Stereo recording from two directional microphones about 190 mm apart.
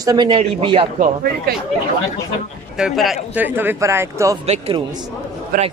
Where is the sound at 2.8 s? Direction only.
Centre (ahead or behind).